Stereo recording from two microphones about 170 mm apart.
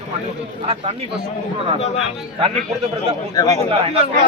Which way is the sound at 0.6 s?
35° right (ahead or behind).